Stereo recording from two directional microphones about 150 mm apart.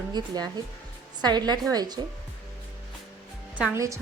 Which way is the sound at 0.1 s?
30° right (ahead or behind).